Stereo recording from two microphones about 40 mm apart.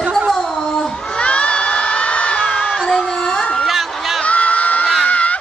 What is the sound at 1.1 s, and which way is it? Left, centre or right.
Crowd, left.